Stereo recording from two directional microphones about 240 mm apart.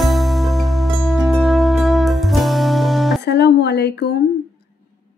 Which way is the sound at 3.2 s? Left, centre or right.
Left.